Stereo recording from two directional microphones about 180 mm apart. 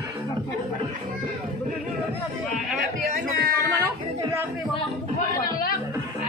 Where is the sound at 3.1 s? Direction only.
55° right (ahead or behind).